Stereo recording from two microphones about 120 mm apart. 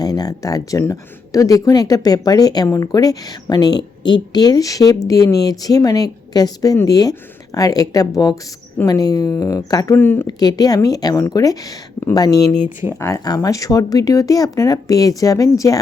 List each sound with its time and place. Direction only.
0.0 s speech: 30° left (ahead or behind)
9.9 s speech: 20° left (ahead or behind)
10.2 s speech: 35° left (ahead or behind)